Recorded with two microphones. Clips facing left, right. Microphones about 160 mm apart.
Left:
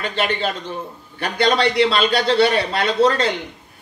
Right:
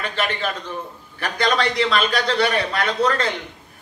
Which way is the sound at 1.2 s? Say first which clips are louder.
Left 3 dB; 35° left (ahead or behind).